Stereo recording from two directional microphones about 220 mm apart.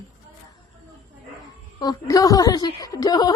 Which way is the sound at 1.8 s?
15° left (ahead or behind).